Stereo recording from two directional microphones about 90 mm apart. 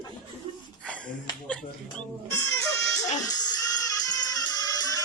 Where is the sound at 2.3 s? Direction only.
30° left (ahead or behind).